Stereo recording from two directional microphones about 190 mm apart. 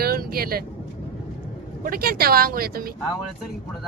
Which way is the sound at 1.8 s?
50° right (ahead or behind).